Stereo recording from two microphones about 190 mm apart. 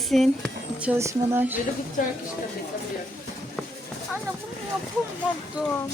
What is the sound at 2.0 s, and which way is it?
Speech, 40° left (ahead or behind).